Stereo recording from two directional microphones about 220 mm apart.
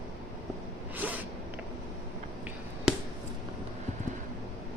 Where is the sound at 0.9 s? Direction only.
5° right (ahead or behind).